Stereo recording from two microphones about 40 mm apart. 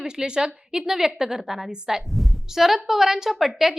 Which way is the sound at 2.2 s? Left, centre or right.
Centre.